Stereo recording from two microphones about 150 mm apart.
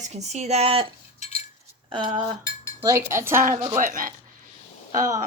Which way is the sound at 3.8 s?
65° right (ahead or behind).